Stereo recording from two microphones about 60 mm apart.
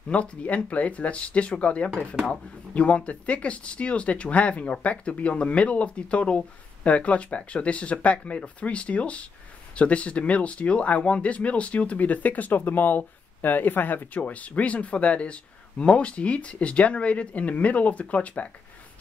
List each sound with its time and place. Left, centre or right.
0.1 s speech: centre